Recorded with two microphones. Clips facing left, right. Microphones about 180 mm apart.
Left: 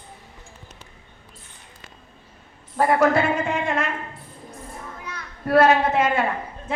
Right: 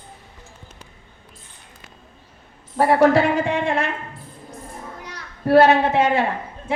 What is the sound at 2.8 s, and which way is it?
A woman's voice, 30° right (ahead or behind).